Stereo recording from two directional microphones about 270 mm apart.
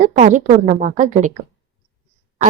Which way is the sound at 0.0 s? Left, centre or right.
Right.